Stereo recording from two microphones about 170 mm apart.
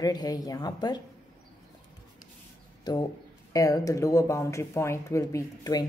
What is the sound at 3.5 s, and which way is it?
Speech, 20° left (ahead or behind).